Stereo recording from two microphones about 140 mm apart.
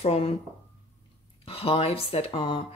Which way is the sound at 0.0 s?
50° left (ahead or behind).